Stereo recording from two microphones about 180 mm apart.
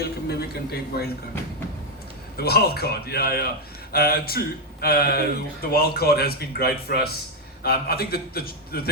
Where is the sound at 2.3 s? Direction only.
60° left (ahead or behind).